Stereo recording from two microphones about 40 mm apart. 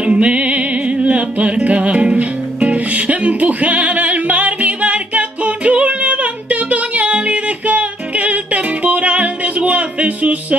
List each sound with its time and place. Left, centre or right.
0.0 s music: right